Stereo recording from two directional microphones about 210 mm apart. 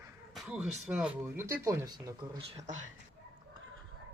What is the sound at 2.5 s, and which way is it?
Speech, 35° right (ahead or behind).